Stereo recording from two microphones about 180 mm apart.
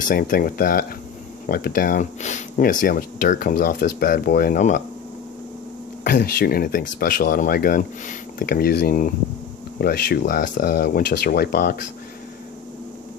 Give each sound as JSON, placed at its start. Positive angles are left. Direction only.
{"t": 0.0, "sound": "speech", "side_deg": 50}
{"t": 6.1, "sound": "speech", "side_deg": 60}